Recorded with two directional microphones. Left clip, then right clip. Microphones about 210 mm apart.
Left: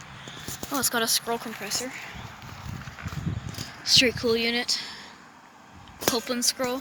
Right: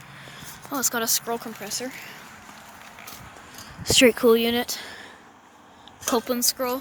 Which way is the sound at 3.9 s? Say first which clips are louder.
Right 4 dB; 35° right (ahead or behind).